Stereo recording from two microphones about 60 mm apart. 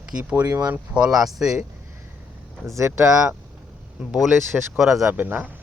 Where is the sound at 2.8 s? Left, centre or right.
Right.